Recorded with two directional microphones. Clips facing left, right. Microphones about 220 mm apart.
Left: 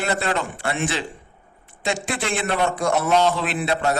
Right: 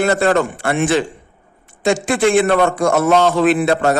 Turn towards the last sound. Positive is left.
turn(degrees=-50)  # may be behind; listen again after turning